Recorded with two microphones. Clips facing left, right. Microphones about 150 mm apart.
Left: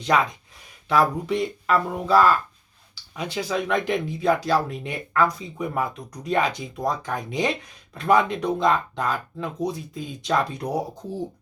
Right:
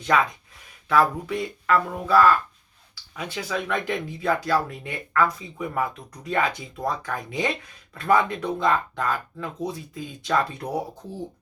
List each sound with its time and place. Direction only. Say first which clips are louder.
0.0 s speech: left 1 dB; 20° left (ahead or behind)